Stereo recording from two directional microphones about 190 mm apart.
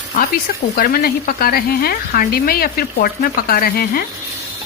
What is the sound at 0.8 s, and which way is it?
A woman's voice, 50° left (ahead or behind).